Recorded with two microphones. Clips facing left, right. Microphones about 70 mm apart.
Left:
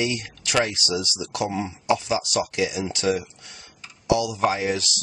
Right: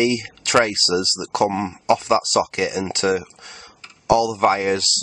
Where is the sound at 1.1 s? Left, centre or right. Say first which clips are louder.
Right 7 dB; right.